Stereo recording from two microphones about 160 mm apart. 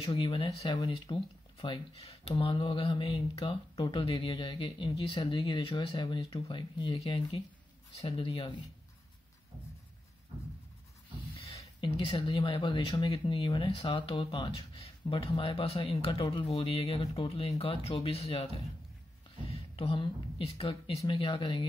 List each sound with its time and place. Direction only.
0.0 s speech: 30° left (ahead or behind)
11.3 s speech: 35° left (ahead or behind)
19.7 s speech: 35° left (ahead or behind)